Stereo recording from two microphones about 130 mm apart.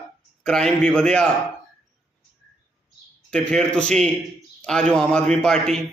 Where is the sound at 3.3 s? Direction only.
5° left (ahead or behind).